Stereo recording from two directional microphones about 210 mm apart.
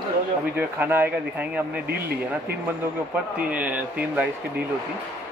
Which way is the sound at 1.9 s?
50° right (ahead or behind).